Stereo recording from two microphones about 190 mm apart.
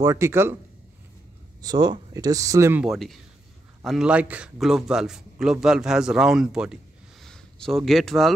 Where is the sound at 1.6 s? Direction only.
20° right (ahead or behind).